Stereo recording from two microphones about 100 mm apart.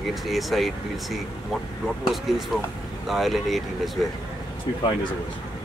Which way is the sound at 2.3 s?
Centre (ahead or behind).